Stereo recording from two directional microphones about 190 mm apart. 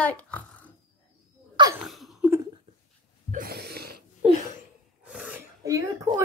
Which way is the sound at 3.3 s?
50° right (ahead or behind).